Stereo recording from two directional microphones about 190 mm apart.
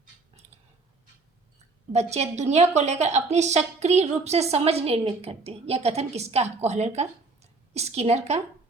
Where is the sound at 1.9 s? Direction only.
35° right (ahead or behind).